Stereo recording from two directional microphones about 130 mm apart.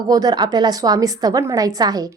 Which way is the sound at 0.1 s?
30° right (ahead or behind).